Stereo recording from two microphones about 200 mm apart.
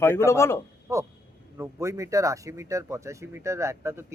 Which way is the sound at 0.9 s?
15° right (ahead or behind).